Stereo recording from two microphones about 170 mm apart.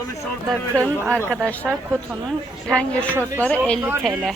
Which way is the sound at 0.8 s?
15° right (ahead or behind).